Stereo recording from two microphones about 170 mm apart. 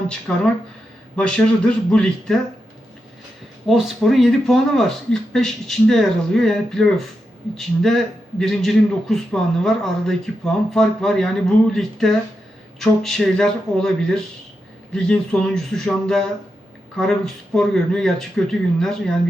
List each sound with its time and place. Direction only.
0.3 s a man's voice: 5° left (ahead or behind)
3.7 s a man's voice: centre (ahead or behind)